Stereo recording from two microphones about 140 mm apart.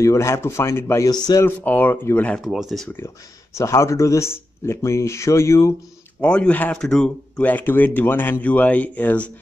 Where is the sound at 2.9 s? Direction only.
20° left (ahead or behind).